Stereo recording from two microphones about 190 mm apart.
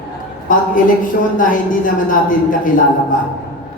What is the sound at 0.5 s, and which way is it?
A man's voice, 45° left (ahead or behind).